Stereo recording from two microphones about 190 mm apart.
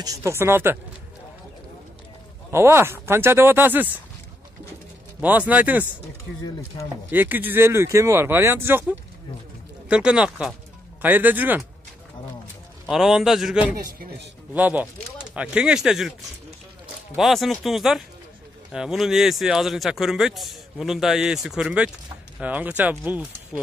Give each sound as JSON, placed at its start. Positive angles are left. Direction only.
{"t": 0.0, "sound": "speech", "side_deg": -15}
{"t": 2.5, "sound": "speech", "side_deg": -15}
{"t": 5.5, "sound": "speech", "side_deg": -10}
{"t": 7.1, "sound": "speech", "side_deg": -10}
{"t": 12.8, "sound": "speech", "side_deg": 0}
{"t": 13.7, "sound": "speech", "side_deg": -50}
{"t": 14.5, "sound": "speech", "side_deg": -10}
{"t": 17.1, "sound": "speech", "side_deg": 0}